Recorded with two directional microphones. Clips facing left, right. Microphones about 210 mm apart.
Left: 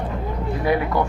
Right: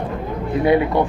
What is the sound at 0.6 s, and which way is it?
Speech, 25° right (ahead or behind).